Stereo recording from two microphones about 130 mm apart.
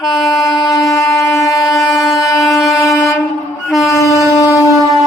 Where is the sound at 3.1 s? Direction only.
25° left (ahead or behind).